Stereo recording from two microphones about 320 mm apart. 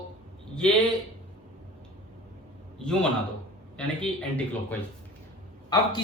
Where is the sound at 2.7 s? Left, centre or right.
Centre.